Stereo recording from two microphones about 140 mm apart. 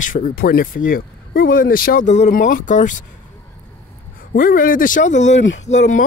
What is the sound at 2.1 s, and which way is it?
Speech, 60° left (ahead or behind).